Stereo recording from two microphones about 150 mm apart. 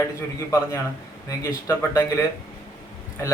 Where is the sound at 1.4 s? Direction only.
20° left (ahead or behind).